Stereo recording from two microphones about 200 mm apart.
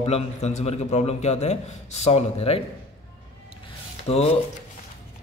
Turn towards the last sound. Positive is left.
turn(degrees=30)  # may be behind; listen again after turning